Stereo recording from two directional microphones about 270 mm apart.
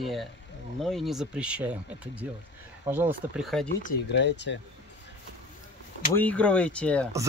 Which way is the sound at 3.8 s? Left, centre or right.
Left.